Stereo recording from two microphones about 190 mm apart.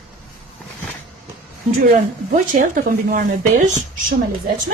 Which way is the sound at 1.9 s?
45° right (ahead or behind).